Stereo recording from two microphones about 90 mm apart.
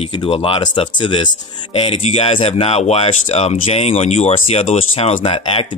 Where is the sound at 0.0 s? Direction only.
85° left.